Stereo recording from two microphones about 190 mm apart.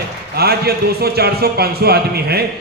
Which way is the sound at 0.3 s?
55° right (ahead or behind).